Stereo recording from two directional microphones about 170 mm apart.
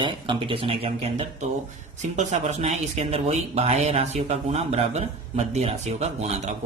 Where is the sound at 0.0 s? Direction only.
30° right (ahead or behind).